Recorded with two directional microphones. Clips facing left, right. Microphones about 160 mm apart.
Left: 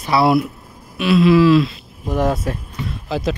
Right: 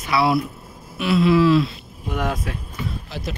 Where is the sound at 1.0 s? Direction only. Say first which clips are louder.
Left 4 dB; 90° left.